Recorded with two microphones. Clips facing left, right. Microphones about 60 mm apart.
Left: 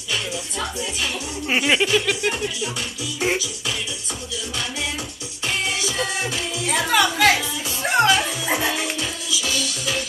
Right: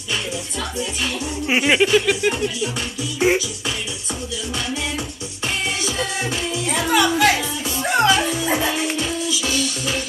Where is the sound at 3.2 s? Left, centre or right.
Right.